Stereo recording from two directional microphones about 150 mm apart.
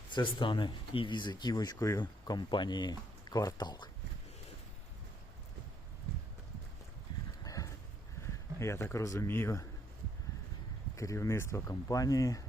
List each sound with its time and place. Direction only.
0.1 s speech: 30° left (ahead or behind)
7.4 s a sound: 25° left (ahead or behind)
8.5 s speech: 20° left (ahead or behind)
10.9 s speech: 20° left (ahead or behind)